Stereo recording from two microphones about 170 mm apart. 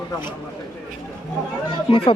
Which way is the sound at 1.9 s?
30° left (ahead or behind).